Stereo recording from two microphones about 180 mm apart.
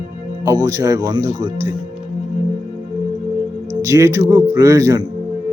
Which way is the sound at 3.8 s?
15° right (ahead or behind).